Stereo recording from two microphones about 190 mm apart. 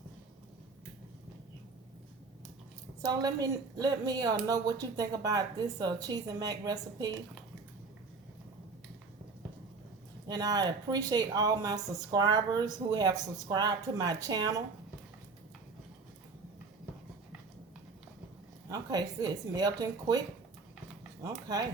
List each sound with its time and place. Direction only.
3.0 s a woman's voice: 20° right (ahead or behind)
10.2 s a woman's voice: 20° right (ahead or behind)
18.7 s a woman's voice: 20° right (ahead or behind)